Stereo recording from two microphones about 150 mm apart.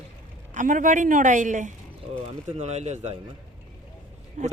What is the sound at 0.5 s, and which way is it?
Speech, 60° right (ahead or behind).